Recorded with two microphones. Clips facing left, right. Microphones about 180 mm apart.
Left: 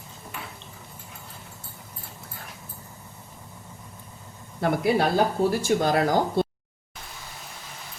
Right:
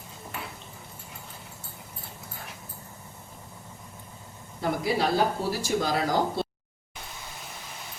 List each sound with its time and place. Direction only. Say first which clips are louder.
4.6 s speech: left 4 dB; 55° left (ahead or behind)